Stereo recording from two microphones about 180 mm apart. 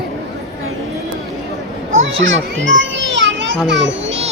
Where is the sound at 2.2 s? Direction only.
90° right.